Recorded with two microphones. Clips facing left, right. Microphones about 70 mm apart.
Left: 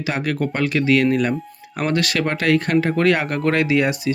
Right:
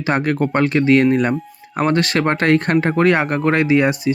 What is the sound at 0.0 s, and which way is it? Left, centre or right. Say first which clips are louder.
Speech: right 4 dB; right.